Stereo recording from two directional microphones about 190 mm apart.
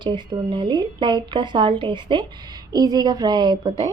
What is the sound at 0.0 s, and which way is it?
Speech, 25° right (ahead or behind).